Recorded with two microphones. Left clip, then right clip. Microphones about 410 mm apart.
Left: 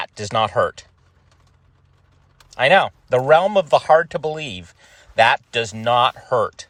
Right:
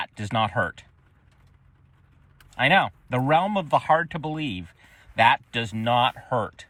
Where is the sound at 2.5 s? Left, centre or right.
Centre.